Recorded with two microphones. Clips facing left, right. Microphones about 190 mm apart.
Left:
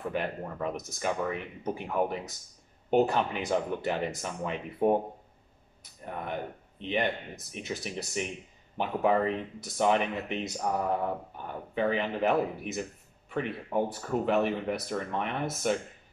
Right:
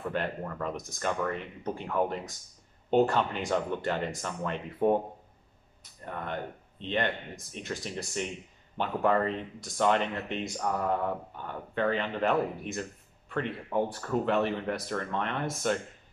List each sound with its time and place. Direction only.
0.1 s speech: 10° left (ahead or behind)
6.0 s speech: 10° left (ahead or behind)